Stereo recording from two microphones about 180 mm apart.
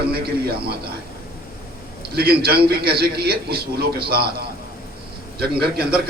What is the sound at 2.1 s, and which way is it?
A man's voice, 60° right (ahead or behind).